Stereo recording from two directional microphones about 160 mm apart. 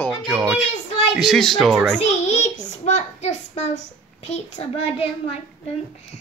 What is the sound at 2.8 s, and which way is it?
A child's voice, 45° left (ahead or behind).